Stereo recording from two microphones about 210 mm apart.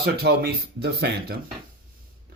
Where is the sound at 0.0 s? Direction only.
50° right (ahead or behind).